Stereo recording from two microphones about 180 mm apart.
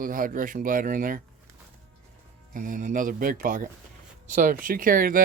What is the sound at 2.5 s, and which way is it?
Speech, 45° right (ahead or behind).